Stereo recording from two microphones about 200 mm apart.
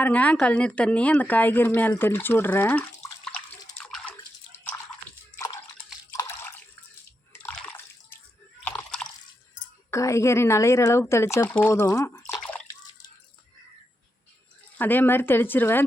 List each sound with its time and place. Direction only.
0.0 s a woman's voice: 5° left (ahead or behind)
3.8 s bathtub: 5° left (ahead or behind)
4.2 s drip: 10° left (ahead or behind)
6.1 s drip: 10° left (ahead or behind)
9.9 s a woman's voice: 15° left (ahead or behind)
14.8 s a woman's voice: 10° left (ahead or behind)